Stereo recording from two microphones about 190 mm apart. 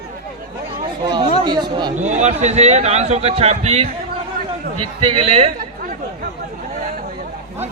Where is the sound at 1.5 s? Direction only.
25° right (ahead or behind).